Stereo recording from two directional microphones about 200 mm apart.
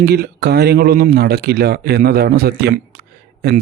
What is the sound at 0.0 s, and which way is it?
Speech, 50° right (ahead or behind).